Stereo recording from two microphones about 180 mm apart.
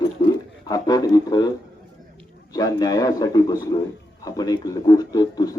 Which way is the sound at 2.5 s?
20° left (ahead or behind).